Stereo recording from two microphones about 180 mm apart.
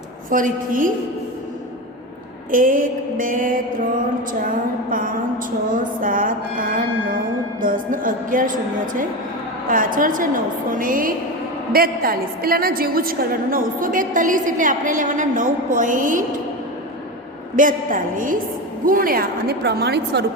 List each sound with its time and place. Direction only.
0.3 s a woman's voice: 50° right (ahead or behind)
2.5 s a woman's voice: 50° right (ahead or behind)
17.6 s a woman's voice: 50° right (ahead or behind); by 20.2 s 70° right (ahead or behind)